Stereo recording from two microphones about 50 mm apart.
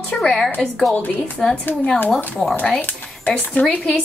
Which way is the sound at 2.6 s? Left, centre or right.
Left.